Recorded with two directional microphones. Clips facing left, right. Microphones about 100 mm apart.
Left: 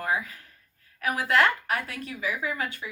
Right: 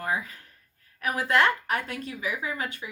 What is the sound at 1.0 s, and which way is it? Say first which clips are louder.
A woman's voice: even; 25° right (ahead or behind).